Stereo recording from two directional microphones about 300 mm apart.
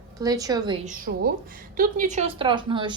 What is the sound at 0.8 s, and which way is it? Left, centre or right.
A woman's voice, right.